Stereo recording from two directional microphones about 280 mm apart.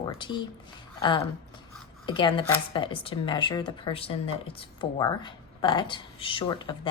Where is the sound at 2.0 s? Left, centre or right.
Centre.